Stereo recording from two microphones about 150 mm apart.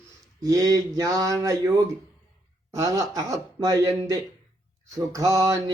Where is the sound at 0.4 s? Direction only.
25° right (ahead or behind).